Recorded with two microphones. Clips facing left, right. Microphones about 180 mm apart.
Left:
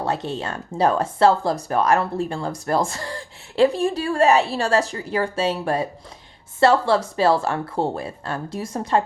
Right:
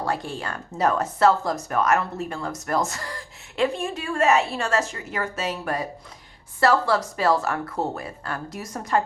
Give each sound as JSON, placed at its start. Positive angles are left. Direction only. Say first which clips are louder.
{"t": 0.0, "sound": "speech", "louder": "left 3 dB", "side_deg": 25}